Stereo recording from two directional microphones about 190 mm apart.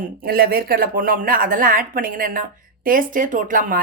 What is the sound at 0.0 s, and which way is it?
A woman's voice, 50° right (ahead or behind).